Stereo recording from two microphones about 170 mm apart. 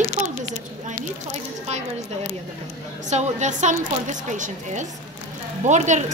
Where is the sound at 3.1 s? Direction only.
45° right (ahead or behind).